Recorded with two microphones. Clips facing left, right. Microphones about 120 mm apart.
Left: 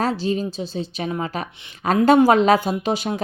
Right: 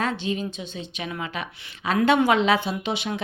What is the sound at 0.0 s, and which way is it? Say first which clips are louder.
A woman's voice: left 5 dB; 35° left (ahead or behind).